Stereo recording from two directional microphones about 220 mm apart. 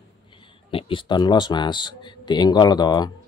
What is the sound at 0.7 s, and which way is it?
Speech, 25° left (ahead or behind).